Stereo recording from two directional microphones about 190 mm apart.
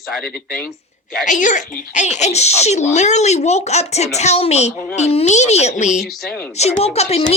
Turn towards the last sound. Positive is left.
turn(degrees=35)  # may be behind; listen again after turning